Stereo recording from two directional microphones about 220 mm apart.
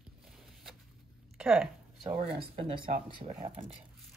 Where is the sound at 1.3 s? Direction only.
5° right (ahead or behind).